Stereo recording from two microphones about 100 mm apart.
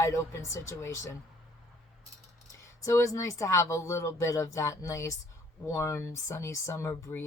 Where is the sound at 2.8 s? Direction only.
30° left (ahead or behind).